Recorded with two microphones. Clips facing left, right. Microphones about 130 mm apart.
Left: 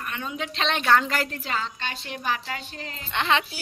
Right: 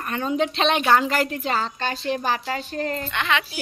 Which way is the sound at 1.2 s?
15° right (ahead or behind).